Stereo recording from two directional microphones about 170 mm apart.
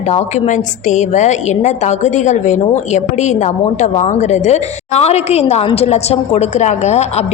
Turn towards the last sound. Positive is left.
turn(degrees=40)  # may be behind; listen again after turning